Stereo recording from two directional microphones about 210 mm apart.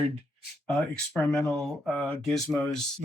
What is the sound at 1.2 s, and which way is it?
Speech, 5° left (ahead or behind).